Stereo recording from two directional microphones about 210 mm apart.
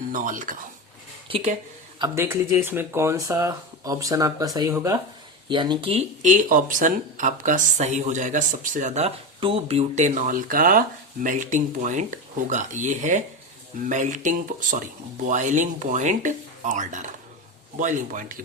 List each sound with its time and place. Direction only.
0.1 s speech: 40° right (ahead or behind)
2.0 s speech: 10° right (ahead or behind); by 18.4 s 40° right (ahead or behind)